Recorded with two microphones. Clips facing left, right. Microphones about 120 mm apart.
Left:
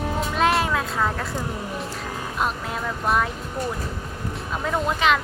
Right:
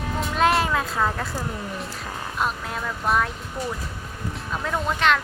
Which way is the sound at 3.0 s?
Centre (ahead or behind).